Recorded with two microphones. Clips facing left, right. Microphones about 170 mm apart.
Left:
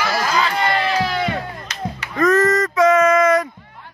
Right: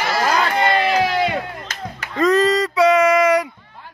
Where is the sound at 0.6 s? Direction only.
20° right (ahead or behind).